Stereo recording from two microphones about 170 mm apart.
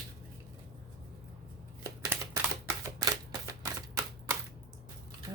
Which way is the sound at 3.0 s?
20° right (ahead or behind).